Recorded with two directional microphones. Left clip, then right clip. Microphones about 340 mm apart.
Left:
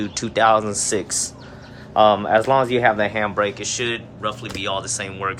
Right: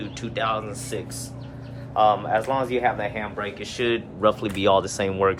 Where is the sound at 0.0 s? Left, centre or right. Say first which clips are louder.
Left 9 dB; centre.